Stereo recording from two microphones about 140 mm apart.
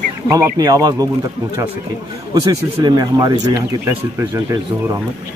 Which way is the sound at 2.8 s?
30° right (ahead or behind).